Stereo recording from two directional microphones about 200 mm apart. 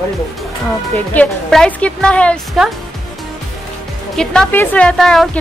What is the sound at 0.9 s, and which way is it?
A woman's voice, 5° left (ahead or behind).